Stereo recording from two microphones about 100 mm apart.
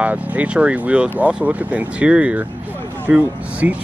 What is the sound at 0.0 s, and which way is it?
Speech, 15° right (ahead or behind).